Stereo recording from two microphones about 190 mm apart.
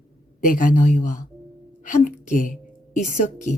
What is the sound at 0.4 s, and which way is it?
A woman's voice, 45° left (ahead or behind).